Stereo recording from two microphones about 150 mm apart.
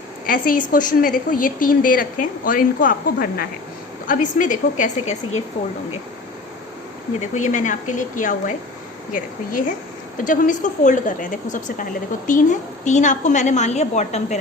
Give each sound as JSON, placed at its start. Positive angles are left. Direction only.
{"t": 0.3, "sound": "a woman's voice", "side_deg": 65}
{"t": 7.2, "sound": "a woman's voice", "side_deg": 55}
{"t": 10.2, "sound": "a woman's voice", "side_deg": 60}